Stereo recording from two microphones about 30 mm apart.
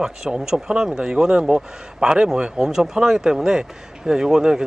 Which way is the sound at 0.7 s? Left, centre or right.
Right.